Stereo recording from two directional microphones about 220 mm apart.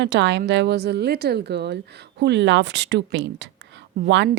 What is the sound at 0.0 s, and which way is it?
A woman's voice, 55° right (ahead or behind).